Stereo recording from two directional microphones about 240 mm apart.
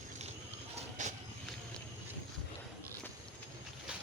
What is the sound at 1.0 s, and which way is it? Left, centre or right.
Vehicle, right.